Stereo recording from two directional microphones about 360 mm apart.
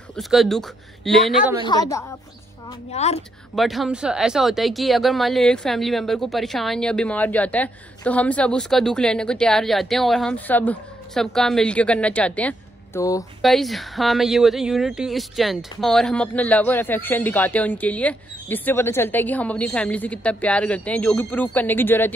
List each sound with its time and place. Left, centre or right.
0.1 s speech: centre
1.6 s a woman's voice: centre
3.5 s speech: centre